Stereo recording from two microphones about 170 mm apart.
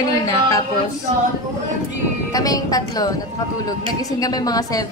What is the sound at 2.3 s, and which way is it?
Speech, 20° left (ahead or behind).